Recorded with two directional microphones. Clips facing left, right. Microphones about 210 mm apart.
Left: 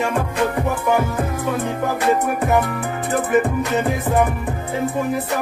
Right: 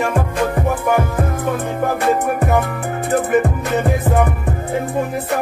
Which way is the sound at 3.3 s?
55° right (ahead or behind).